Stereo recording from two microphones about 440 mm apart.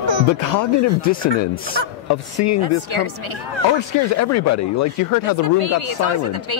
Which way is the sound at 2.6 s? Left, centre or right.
Right.